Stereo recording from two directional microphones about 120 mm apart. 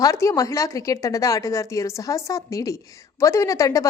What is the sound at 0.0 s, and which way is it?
A woman's voice, 25° left (ahead or behind).